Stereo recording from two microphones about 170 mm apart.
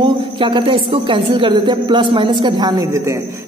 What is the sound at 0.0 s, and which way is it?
A woman's voice, 30° right (ahead or behind).